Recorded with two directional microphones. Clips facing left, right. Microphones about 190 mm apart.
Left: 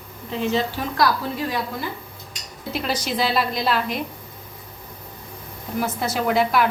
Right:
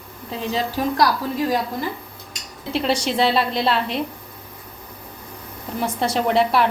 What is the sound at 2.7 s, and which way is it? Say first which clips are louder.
A woman's voice: right 4 dB; 30° right (ahead or behind).